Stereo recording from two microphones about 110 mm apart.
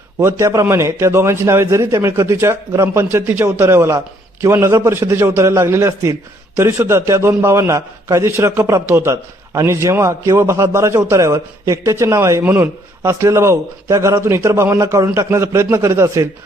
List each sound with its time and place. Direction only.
0.2 s a man's voice: 25° right (ahead or behind)